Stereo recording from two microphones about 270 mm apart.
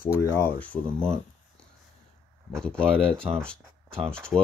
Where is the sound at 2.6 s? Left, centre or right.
Centre.